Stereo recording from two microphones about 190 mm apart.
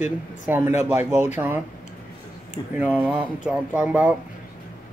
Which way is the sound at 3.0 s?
10° right (ahead or behind).